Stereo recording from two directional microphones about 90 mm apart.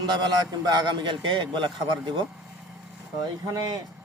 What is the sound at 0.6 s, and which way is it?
A man's voice, 50° right (ahead or behind).